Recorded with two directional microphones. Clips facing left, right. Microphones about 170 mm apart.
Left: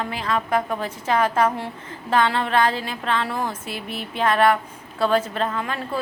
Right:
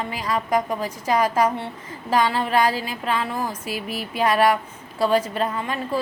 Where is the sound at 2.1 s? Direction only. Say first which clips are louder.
Even; 5° right (ahead or behind).